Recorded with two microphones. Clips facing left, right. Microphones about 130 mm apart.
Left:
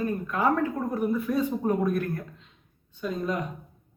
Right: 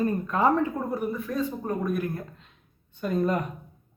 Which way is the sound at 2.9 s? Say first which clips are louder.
Right 4 dB; 55° right (ahead or behind).